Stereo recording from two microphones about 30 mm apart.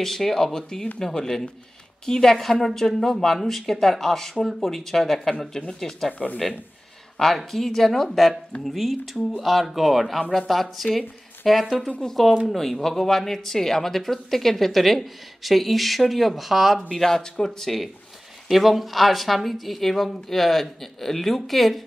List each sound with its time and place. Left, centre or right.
0.0 s a woman's voice: centre
2.6 s speech: centre
8.6 s a woman's voice: centre
16.9 s speech: centre
18.5 s a woman's voice: centre